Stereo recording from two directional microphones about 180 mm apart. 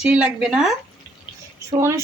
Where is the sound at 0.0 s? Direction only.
5° right (ahead or behind).